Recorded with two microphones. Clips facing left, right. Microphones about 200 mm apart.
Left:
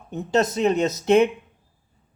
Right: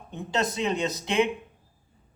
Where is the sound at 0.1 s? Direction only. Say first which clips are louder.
Left 7 dB; 45° left (ahead or behind).